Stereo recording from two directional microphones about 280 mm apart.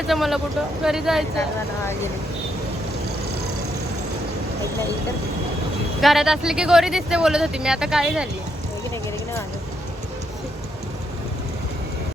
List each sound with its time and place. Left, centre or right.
0.1 s speech: centre
6.0 s speech: centre